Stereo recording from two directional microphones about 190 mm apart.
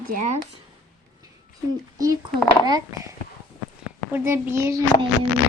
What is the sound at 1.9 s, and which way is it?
Speech, 20° right (ahead or behind).